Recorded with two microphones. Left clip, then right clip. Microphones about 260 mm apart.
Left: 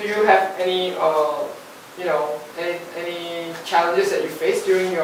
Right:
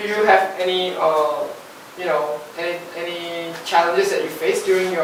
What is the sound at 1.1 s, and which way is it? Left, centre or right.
Speech, left.